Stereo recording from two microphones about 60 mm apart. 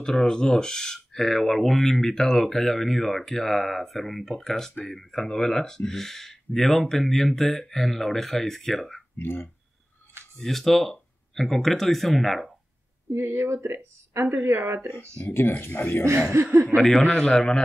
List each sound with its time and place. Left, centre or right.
0.0 s speech: centre
9.2 s speech: left
10.4 s speech: centre
13.1 s speech: right
14.2 s a woman's voice: right
15.2 s speech: left
16.1 s speech: right
16.6 s a man's voice: centre